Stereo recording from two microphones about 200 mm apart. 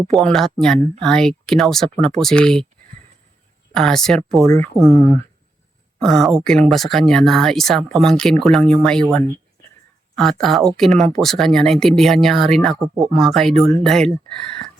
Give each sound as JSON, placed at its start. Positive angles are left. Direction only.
{"t": 0.1, "sound": "speech", "side_deg": 0}
{"t": 3.7, "sound": "speech", "side_deg": 0}
{"t": 4.4, "sound": "speech", "side_deg": 15}
{"t": 4.8, "sound": "speech", "side_deg": 5}
{"t": 10.4, "sound": "speech", "side_deg": 0}